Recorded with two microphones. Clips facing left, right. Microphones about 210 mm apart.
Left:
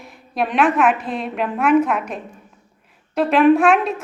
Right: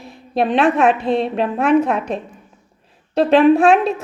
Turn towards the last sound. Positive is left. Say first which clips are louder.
# right 2 dB
turn(degrees=-30)  # may be behind; listen again after turning